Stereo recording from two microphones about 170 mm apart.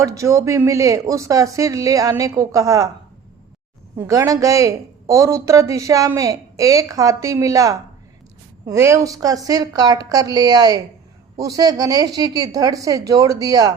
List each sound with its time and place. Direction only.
0.0 s a woman's voice: 20° right (ahead or behind)
3.9 s a woman's voice: 15° right (ahead or behind)